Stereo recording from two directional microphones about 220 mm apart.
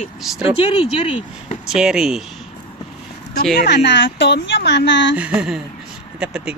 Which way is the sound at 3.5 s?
50° left (ahead or behind).